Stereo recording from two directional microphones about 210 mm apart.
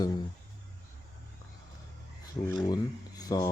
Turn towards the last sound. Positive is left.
turn(degrees=20)  # may be behind; listen again after turning